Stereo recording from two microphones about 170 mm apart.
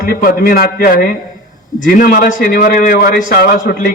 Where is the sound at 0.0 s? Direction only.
60° left (ahead or behind).